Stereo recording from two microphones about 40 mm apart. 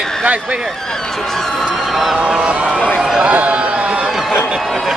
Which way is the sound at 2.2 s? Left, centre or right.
Right.